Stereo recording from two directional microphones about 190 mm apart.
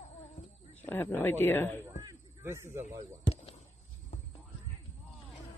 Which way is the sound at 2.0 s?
15° right (ahead or behind).